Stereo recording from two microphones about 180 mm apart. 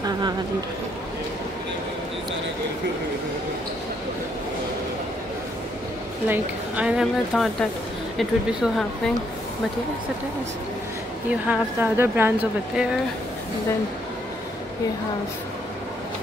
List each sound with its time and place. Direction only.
6.2 s speech: 10° right (ahead or behind)
11.4 s speech: 10° right (ahead or behind)